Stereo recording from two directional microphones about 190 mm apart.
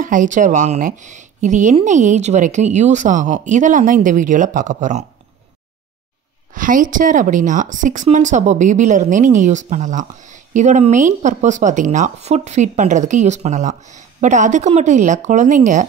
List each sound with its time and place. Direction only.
0.0 s speech: 45° right (ahead or behind)
6.5 s speech: 45° right (ahead or behind)